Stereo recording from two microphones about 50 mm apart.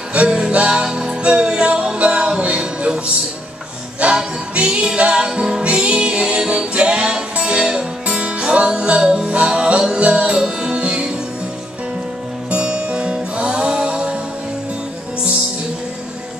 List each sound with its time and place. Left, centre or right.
0.1 s music: right
4.0 s music: right
12.4 s music: right